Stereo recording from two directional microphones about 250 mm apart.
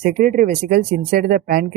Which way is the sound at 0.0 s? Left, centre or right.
Right.